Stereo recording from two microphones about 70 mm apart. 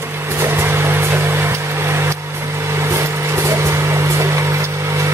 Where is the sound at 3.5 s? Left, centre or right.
Right.